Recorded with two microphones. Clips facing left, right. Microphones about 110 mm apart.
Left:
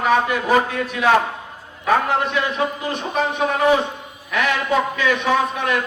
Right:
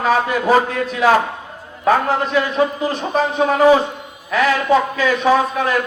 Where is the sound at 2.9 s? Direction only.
35° right (ahead or behind).